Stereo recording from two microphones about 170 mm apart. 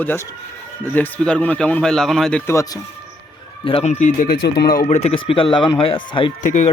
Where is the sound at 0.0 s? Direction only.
10° left (ahead or behind).